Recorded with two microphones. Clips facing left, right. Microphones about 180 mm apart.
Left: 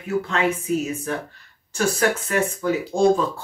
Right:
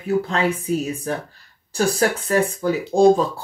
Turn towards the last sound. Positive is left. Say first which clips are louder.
# right 4 dB
turn(degrees=-35)  # may be behind; listen again after turning